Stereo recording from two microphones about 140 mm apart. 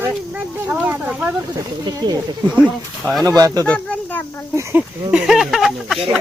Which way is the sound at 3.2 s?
25° right (ahead or behind).